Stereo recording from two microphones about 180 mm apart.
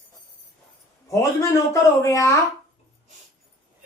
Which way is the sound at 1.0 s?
15° left (ahead or behind).